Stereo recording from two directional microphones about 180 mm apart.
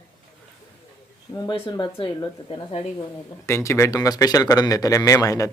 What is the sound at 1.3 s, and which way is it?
Speech, 25° left (ahead or behind).